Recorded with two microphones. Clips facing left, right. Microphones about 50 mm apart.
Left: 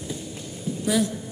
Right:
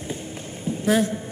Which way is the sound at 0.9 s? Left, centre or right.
Right.